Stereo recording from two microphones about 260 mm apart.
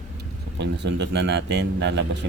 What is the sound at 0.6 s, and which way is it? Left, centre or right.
Speech, right.